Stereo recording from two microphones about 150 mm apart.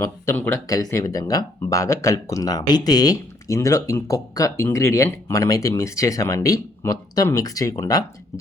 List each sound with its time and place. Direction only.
0.0 s speech: 15° left (ahead or behind)